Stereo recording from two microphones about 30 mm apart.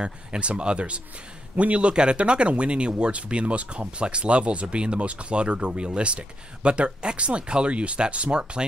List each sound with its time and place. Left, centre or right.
0.0 s speech: right
8.3 s speech: right